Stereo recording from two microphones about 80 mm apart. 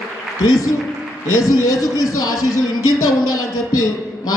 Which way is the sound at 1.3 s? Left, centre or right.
Left.